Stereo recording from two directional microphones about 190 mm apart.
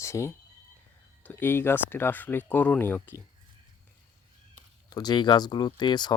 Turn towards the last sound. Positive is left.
turn(degrees=25)  # may be behind; listen again after turning